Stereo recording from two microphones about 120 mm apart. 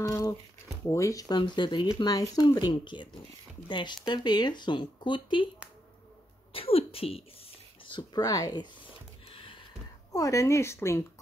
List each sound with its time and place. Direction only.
0.0 s speech: 25° left (ahead or behind); by 5.5 s 40° left (ahead or behind)
6.5 s speech: 50° left (ahead or behind)
7.8 s speech: 40° left (ahead or behind)
9.3 s a sound: 45° left (ahead or behind)
10.1 s speech: 25° left (ahead or behind)